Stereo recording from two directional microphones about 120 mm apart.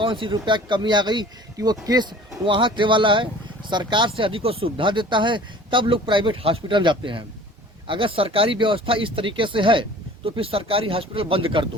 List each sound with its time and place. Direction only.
0.0 s speech: 45° right (ahead or behind)